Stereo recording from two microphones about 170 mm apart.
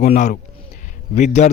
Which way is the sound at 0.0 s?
45° left (ahead or behind).